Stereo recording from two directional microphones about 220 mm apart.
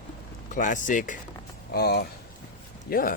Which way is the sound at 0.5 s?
35° left (ahead or behind).